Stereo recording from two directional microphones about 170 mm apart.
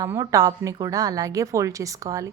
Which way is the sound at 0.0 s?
20° right (ahead or behind).